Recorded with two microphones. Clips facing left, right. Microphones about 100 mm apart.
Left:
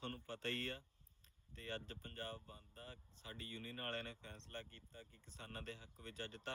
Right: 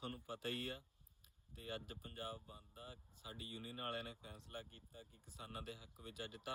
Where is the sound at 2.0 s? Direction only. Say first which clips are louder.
Even; 55° left (ahead or behind).